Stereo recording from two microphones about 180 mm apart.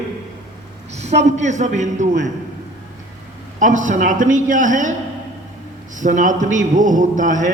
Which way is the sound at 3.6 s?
45° right (ahead or behind).